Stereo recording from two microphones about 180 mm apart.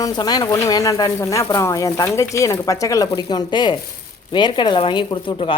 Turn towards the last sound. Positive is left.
turn(degrees=30)  # may be behind; listen again after turning